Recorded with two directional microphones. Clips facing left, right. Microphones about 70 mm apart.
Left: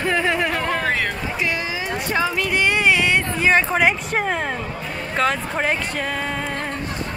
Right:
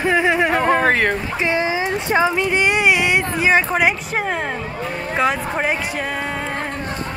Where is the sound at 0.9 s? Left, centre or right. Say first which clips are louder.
Right 5 dB; right.